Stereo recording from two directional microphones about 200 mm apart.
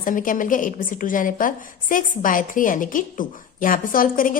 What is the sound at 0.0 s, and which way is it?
A woman's voice, 45° left (ahead or behind).